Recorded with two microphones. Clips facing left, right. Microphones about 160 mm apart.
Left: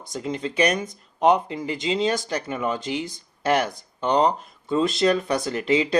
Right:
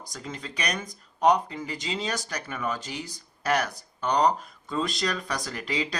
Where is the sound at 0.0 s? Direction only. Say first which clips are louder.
Left 10 dB; 25° left (ahead or behind).